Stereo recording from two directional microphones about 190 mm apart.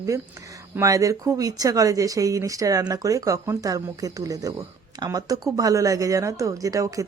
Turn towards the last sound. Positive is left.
turn(degrees=-15)  # may be behind; listen again after turning